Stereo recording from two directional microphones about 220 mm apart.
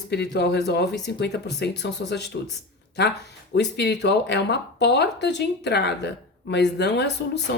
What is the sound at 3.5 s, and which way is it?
Speech, 50° left (ahead or behind).